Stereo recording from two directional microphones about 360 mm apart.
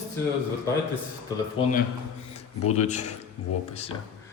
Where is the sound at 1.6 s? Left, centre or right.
Centre.